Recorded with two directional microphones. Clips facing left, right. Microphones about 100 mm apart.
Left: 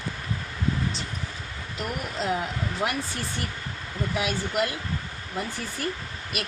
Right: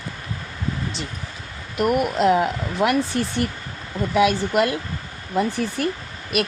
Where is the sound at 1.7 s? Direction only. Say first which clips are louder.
Right 12 dB; 70° right (ahead or behind); by 5.8 s 90° right.